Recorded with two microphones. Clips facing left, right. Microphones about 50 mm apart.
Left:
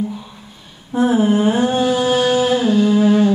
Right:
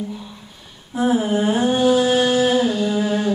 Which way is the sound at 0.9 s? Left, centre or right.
Left.